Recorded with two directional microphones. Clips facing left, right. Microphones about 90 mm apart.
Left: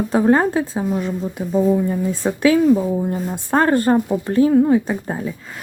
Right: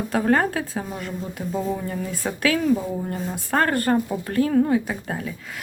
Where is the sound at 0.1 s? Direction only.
20° left (ahead or behind).